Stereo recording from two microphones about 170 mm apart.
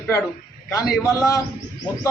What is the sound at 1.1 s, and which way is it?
Speech, 20° left (ahead or behind).